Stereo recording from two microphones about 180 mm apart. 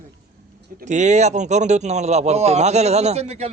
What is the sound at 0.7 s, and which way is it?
A man's voice, 40° right (ahead or behind).